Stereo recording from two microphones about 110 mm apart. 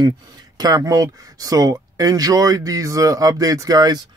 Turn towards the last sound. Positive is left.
turn(degrees=-40)  # may be behind; listen again after turning